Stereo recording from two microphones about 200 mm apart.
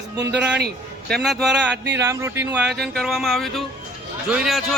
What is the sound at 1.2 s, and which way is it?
Speech, centre (ahead or behind).